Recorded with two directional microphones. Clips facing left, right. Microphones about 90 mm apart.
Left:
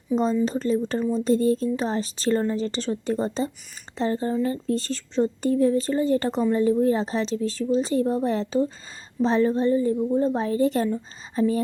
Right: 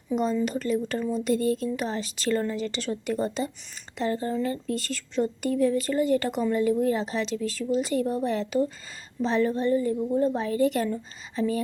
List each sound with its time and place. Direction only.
0.1 s speech: 10° left (ahead or behind)
0.4 s a woman's voice: 30° left (ahead or behind)
3.9 s a sound: 30° left (ahead or behind)
4.4 s a woman's voice: 30° left (ahead or behind)
9.2 s a sound: 30° left (ahead or behind)
10.3 s a woman's voice: 30° left (ahead or behind)